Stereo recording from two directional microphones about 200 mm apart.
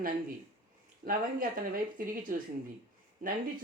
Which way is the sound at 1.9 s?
45° right (ahead or behind).